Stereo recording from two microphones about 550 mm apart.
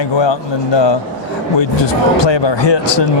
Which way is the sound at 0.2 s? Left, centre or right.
Left.